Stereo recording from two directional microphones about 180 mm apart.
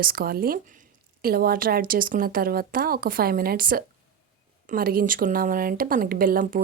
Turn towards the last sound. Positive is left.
turn(degrees=-50)  # may be behind; listen again after turning